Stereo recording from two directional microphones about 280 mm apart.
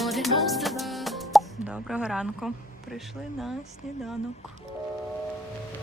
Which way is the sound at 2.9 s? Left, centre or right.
Centre.